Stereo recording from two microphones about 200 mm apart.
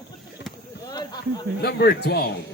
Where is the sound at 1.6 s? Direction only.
55° left (ahead or behind).